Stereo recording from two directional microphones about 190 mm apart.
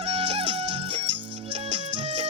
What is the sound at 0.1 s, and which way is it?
Music, 30° right (ahead or behind).